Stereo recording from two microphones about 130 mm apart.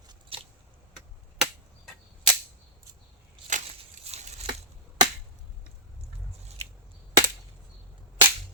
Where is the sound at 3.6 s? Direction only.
55° right (ahead or behind).